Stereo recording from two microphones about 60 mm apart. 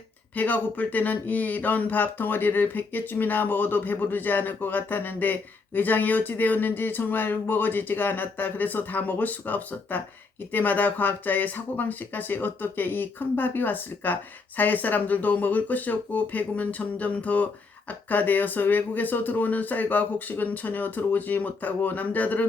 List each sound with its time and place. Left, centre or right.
0.3 s speech: left